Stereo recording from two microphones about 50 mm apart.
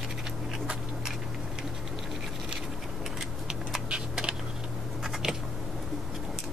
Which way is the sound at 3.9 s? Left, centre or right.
Centre.